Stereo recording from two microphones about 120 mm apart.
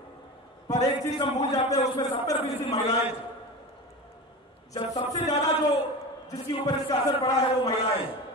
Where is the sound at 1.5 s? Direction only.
30° left (ahead or behind).